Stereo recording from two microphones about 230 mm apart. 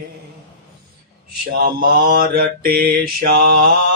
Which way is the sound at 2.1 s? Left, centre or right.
Right.